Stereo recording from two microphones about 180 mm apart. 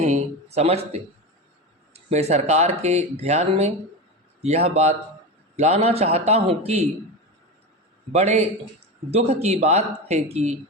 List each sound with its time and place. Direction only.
0.0 s speech: 40° right (ahead or behind)
1.9 s speech: 35° right (ahead or behind)
8.1 s speech: 40° right (ahead or behind)